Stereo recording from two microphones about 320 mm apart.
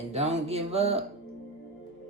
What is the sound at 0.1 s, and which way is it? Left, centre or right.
Speech, centre.